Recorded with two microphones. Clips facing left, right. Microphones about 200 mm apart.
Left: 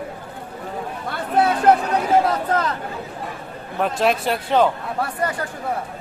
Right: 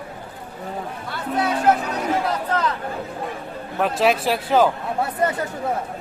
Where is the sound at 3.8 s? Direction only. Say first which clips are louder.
Right 1 dB; centre (ahead or behind).